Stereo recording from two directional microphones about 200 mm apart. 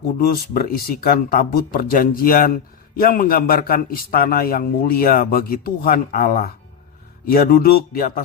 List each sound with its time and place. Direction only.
0.2 s a man's voice: 50° left (ahead or behind)